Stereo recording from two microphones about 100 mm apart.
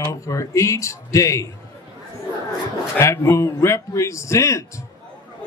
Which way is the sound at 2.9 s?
30° left (ahead or behind).